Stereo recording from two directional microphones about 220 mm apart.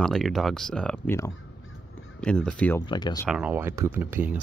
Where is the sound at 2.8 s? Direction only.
20° left (ahead or behind).